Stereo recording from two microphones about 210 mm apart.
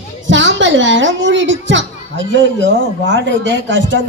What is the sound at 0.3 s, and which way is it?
A woman's voice, 60° right (ahead or behind).